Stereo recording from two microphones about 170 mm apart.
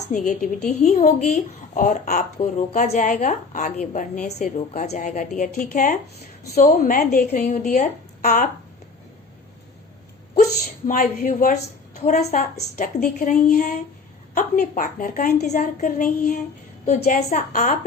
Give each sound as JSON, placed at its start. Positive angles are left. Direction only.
{"t": 0.1, "sound": "a woman's voice", "side_deg": 45}
{"t": 7.3, "sound": "a woman's voice", "side_deg": 45}
{"t": 10.8, "sound": "a woman's voice", "side_deg": 50}
{"t": 15.4, "sound": "a woman's voice", "side_deg": 45}